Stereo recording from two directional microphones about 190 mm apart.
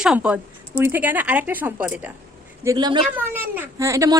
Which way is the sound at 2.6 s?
20° right (ahead or behind).